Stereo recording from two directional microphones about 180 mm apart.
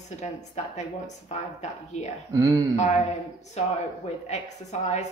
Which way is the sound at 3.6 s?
35° left (ahead or behind).